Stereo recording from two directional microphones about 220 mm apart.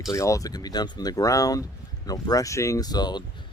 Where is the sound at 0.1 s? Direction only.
15° left (ahead or behind).